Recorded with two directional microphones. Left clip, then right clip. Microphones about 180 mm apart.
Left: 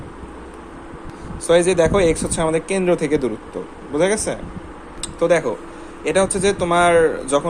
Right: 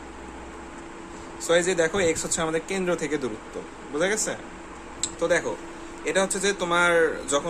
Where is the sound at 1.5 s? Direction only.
25° left (ahead or behind).